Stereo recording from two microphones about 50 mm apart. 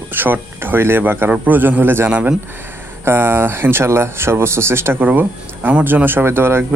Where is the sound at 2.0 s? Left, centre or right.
Right.